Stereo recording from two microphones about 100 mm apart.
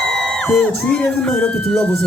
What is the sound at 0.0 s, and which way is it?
Music, 10° left (ahead or behind).